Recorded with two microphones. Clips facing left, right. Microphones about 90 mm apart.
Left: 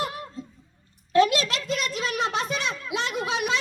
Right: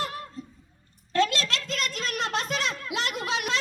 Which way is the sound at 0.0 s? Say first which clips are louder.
Left 2 dB; 20° left (ahead or behind).